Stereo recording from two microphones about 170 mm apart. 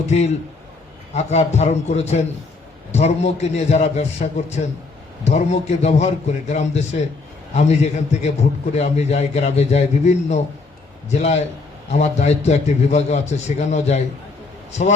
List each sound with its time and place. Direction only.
0.1 s a man's voice: 40° left (ahead or behind)